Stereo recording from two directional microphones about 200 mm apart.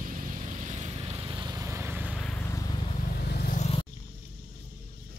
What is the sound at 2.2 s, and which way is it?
Vehicle, 10° left (ahead or behind).